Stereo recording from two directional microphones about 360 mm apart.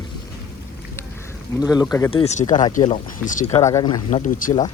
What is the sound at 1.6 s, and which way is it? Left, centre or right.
Speech, centre.